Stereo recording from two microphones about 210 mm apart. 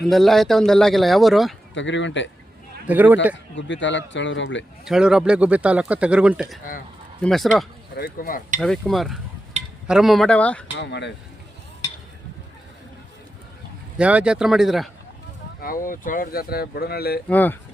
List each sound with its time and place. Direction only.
0.0 s speech: centre (ahead or behind)
1.7 s speech: 60° left (ahead or behind)
2.8 s a man's voice: 10° right (ahead or behind)
3.5 s speech: 60° left (ahead or behind)
4.9 s speech: 5° right (ahead or behind)
7.9 s speech: 45° left (ahead or behind)
8.6 s speech: centre (ahead or behind)
10.8 s speech: 55° left (ahead or behind)
14.0 s speech: 5° right (ahead or behind)
15.6 s speech: 40° left (ahead or behind)
17.2 s speech: 10° left (ahead or behind)